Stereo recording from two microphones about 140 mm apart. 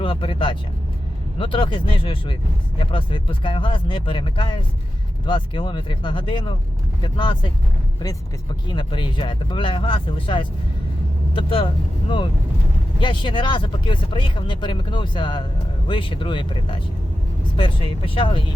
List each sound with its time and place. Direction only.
0.0 s speech: 40° left (ahead or behind)
8.6 s speech: 35° left (ahead or behind)
13.0 s speech: 35° left (ahead or behind)